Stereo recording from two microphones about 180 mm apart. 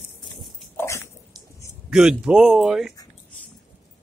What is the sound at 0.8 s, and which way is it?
Dog, 15° left (ahead or behind).